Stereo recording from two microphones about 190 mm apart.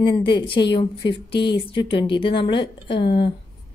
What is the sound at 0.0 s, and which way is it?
A woman's voice, 25° left (ahead or behind).